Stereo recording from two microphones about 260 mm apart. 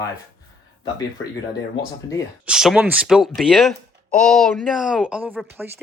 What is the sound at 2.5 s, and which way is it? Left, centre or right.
Speech, centre.